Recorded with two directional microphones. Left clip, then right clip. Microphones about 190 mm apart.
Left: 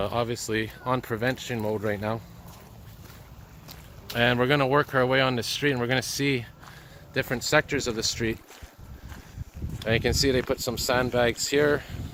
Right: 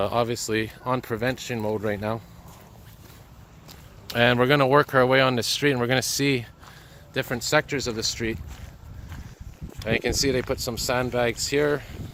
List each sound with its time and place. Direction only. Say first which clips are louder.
0.0 s speech: right 4 dB; 35° right (ahead or behind)
4.0 s speech: right 3 dB; 35° right (ahead or behind)
7.1 s speech: right 1 dB; 20° right (ahead or behind); by 8.4 s centre (ahead or behind)
9.7 s speech: even; 10° right (ahead or behind)